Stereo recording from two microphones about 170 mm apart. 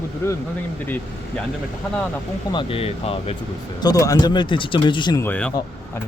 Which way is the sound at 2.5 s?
30° left (ahead or behind).